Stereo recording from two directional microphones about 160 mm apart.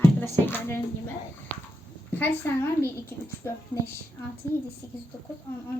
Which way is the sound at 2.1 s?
10° left (ahead or behind).